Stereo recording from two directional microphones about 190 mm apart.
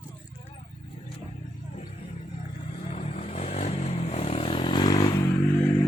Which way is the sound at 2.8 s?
35° left (ahead or behind).